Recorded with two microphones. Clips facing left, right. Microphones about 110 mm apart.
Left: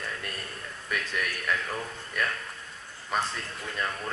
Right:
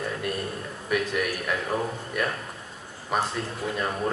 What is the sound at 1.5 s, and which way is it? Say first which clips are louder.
Speech: right 4 dB; 25° right (ahead or behind).